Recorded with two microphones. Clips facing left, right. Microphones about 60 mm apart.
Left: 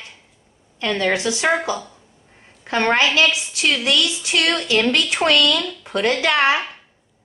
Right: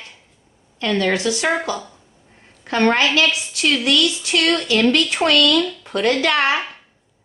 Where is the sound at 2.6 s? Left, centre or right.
Centre.